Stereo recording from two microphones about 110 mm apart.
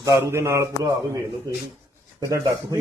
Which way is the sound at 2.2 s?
35° right (ahead or behind).